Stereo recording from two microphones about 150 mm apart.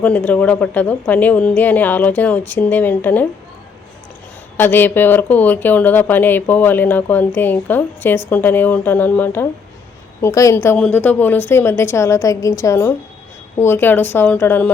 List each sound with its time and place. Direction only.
0.0 s speech: 10° left (ahead or behind)
4.5 s speech: 15° left (ahead or behind)